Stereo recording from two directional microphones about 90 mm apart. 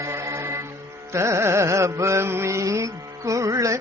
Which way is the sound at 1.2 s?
30° right (ahead or behind).